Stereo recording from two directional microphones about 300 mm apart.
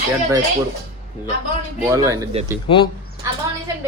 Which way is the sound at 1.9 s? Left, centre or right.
Centre.